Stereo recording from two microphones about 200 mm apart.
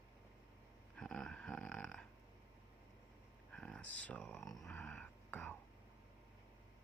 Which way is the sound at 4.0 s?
5° left (ahead or behind).